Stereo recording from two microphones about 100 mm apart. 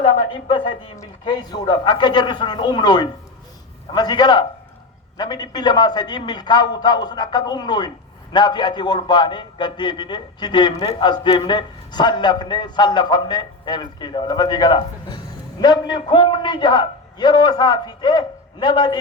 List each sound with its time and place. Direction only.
0.0 s speech: 55° left (ahead or behind)
1.2 s a man's voice: 45° left (ahead or behind)